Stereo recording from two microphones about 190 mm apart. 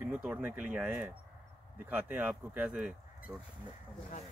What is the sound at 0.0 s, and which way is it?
Speech, 5° right (ahead or behind).